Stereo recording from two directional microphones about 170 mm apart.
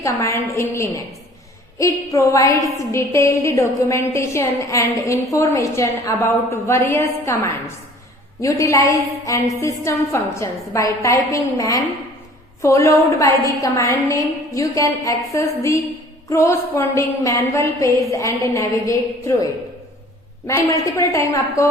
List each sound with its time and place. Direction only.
0.0 s a woman's voice: 15° left (ahead or behind)
20.7 s a woman's voice: 20° left (ahead or behind)